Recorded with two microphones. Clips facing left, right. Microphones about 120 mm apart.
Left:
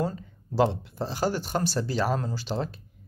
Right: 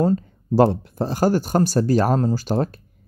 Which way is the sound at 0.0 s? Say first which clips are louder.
Right 10 dB; 40° right (ahead or behind).